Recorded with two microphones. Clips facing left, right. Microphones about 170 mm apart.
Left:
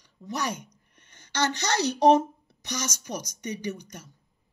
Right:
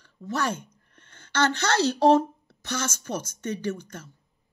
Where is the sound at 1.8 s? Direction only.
15° left (ahead or behind).